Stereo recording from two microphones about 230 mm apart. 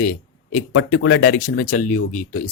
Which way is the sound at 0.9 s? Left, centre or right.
Left.